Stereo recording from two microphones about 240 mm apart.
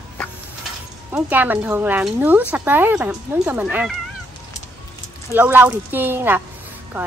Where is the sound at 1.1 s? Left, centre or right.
Centre.